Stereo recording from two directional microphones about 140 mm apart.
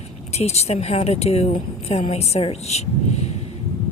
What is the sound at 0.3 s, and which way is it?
Speech, 50° left (ahead or behind).